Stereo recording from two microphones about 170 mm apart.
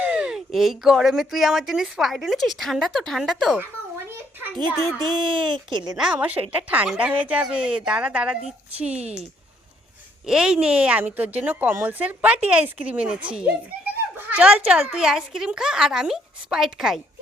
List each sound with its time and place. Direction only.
0.0 s speech: 5° right (ahead or behind)
4.8 s speech: 15° left (ahead or behind)
5.0 s speech: 25° right (ahead or behind)
6.0 s a woman's voice: 5° right (ahead or behind)
10.2 s a woman's voice: 5° right (ahead or behind)